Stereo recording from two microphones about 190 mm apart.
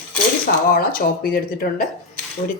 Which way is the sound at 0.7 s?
50° left (ahead or behind).